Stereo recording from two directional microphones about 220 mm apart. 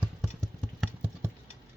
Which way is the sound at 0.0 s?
Centre (ahead or behind).